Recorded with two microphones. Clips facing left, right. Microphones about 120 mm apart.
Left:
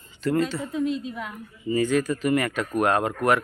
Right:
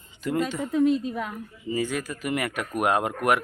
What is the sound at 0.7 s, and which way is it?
Speech, 50° right (ahead or behind).